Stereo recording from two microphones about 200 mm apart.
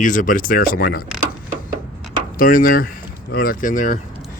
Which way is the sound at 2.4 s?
45° left (ahead or behind).